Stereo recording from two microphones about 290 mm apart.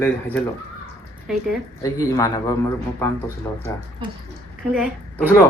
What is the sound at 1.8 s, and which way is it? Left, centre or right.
A woman's voice, centre.